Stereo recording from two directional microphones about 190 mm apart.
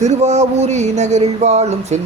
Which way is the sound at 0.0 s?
35° right (ahead or behind).